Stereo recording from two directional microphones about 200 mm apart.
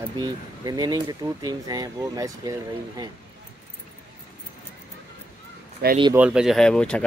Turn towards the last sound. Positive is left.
turn(degrees=5)  # may be behind; listen again after turning